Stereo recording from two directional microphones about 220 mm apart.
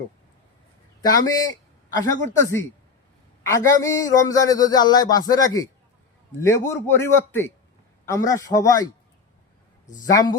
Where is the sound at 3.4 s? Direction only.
15° left (ahead or behind).